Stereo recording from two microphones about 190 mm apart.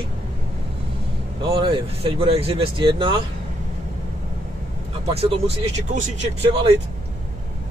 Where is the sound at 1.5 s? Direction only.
25° right (ahead or behind).